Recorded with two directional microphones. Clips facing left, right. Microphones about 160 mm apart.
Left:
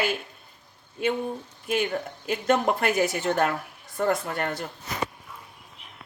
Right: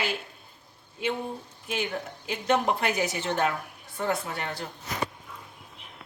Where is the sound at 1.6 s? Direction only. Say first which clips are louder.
Left 5 dB; 55° left (ahead or behind).